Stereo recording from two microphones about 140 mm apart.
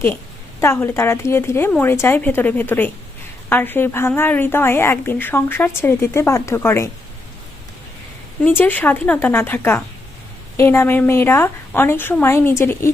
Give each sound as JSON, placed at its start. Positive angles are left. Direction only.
{"t": 0.6, "sound": "a woman's voice", "side_deg": 15}
{"t": 8.4, "sound": "a woman's voice", "side_deg": 15}